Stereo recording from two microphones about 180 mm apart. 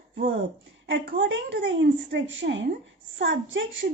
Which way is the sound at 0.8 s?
80° right.